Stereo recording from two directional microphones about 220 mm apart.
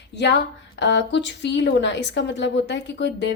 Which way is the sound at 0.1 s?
50° left (ahead or behind).